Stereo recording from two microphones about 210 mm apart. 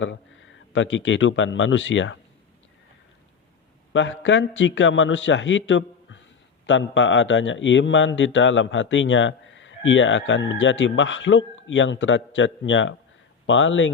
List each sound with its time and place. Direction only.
0.0 s speech: 65° left (ahead or behind)
3.9 s a man's voice: 60° left (ahead or behind)